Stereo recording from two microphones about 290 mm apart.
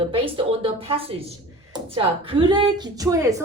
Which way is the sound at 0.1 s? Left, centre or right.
Centre.